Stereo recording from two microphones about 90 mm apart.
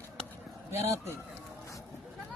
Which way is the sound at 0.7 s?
30° right (ahead or behind).